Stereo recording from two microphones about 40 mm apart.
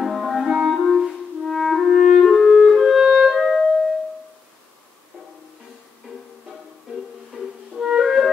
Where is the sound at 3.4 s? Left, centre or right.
Centre.